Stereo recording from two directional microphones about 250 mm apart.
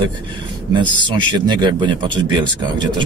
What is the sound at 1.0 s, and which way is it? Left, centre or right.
Speech, centre.